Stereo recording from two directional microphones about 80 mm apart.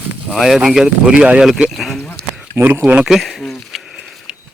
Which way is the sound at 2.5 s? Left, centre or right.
Right.